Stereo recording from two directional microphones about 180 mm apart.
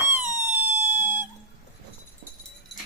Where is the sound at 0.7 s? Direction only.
10° right (ahead or behind).